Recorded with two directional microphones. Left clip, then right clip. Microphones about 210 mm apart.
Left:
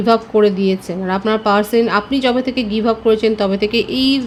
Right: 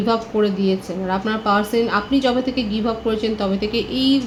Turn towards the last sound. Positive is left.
turn(degrees=55)  # may be behind; listen again after turning